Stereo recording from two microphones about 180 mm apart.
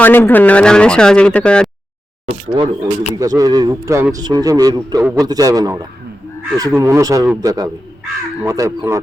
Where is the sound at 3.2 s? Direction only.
20° right (ahead or behind).